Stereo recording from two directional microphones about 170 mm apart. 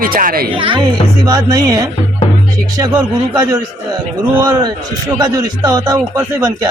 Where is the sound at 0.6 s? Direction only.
30° right (ahead or behind).